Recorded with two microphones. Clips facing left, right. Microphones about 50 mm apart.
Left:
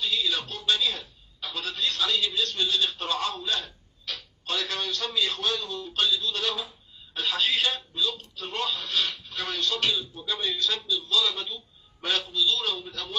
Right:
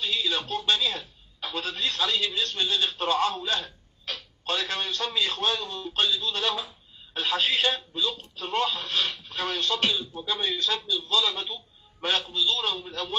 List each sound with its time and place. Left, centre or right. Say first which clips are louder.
0.0 s a man's voice: even; right